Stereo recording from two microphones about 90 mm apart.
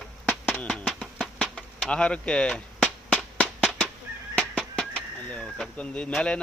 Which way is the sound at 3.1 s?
5° left (ahead or behind).